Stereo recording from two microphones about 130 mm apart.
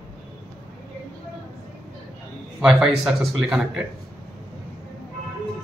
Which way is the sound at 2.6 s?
5° right (ahead or behind).